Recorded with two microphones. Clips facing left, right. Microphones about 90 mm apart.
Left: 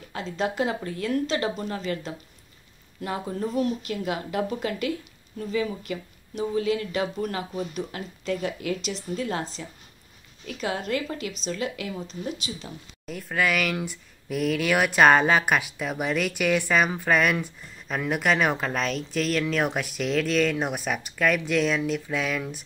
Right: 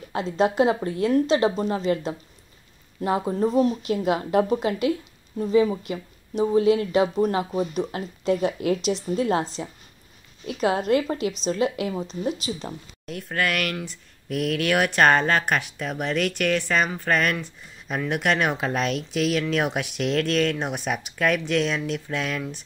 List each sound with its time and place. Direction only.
0.1 s speech: 40° right (ahead or behind)
3.3 s speech: 35° right (ahead or behind)
5.4 s a woman's voice: 30° right (ahead or behind)
10.6 s a woman's voice: 45° right (ahead or behind)
13.0 s speech: centre (ahead or behind)